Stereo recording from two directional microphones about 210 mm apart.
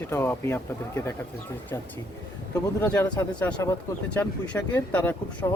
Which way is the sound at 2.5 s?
15° left (ahead or behind).